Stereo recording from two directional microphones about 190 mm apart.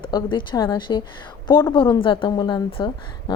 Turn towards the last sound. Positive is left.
turn(degrees=25)  # may be behind; listen again after turning